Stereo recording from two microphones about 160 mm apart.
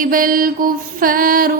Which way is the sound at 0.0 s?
60° right (ahead or behind).